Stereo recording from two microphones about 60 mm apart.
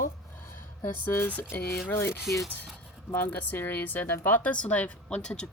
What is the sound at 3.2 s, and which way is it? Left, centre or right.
Speech, left.